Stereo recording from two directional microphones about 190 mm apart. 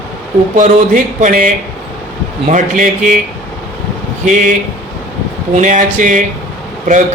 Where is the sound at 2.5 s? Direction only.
40° right (ahead or behind).